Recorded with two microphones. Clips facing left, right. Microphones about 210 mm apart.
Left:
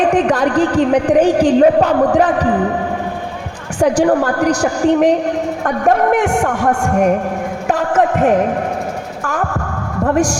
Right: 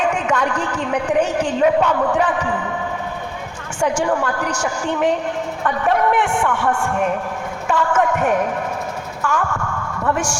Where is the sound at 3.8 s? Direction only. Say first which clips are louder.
Left 7 dB; 35° left (ahead or behind).